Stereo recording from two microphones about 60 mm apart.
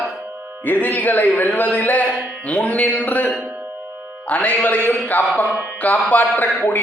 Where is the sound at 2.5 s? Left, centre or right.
Left.